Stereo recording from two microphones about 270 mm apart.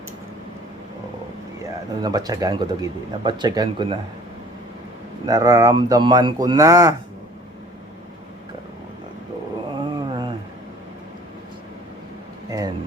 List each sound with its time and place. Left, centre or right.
2.0 s speech: centre
5.2 s speech: centre
9.7 s dog: centre
12.5 s a sound: centre